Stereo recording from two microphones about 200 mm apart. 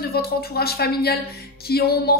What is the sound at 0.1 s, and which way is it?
Speech, 50° left (ahead or behind).